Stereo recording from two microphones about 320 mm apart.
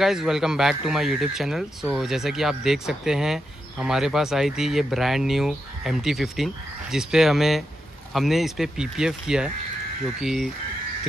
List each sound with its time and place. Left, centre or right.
0.0 s speech: centre